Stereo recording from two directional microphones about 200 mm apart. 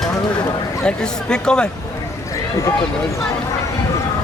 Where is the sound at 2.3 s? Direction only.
15° left (ahead or behind).